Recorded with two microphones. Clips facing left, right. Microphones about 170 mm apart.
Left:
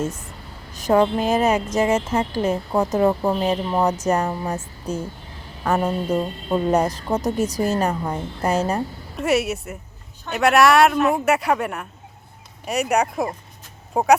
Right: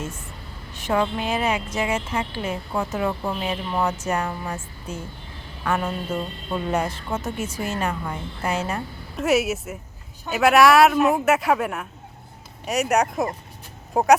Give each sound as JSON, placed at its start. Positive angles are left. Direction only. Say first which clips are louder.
{"t": 0.7, "sound": "a woman's voice", "louder": "left 6 dB", "side_deg": 40}
{"t": 9.1, "sound": "a man's voice", "louder": "even", "side_deg": 0}